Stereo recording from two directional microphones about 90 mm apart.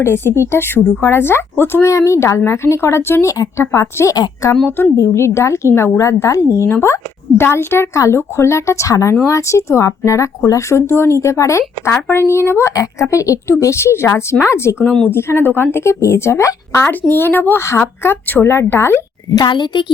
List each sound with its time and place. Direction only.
0.0 s a woman's voice: 30° left (ahead or behind)
16.9 s a woman's voice: 20° left (ahead or behind)
19.5 s a woman's voice: 60° left (ahead or behind)